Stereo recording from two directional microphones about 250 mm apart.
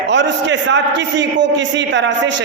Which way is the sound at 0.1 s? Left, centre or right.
Right.